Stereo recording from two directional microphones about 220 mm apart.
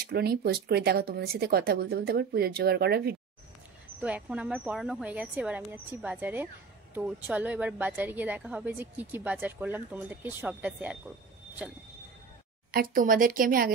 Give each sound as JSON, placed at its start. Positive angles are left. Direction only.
{"t": 0.0, "sound": "speech", "side_deg": -45}
{"t": 4.0, "sound": "speech", "side_deg": -5}
{"t": 12.7, "sound": "speech", "side_deg": -40}